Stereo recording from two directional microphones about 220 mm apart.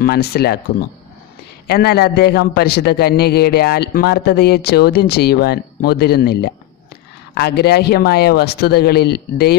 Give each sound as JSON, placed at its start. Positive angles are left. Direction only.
{"t": 0.0, "sound": "a man's voice", "side_deg": 45}